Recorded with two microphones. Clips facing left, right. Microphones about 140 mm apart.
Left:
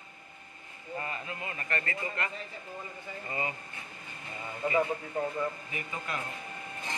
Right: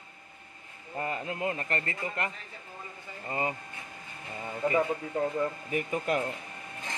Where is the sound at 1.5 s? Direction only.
30° right (ahead or behind).